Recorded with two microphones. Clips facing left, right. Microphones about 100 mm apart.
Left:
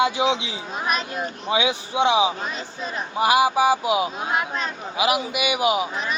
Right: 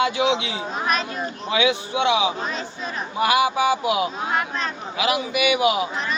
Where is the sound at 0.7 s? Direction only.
5° left (ahead or behind).